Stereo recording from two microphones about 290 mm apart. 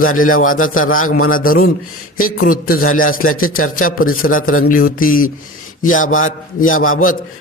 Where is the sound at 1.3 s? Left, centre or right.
Left.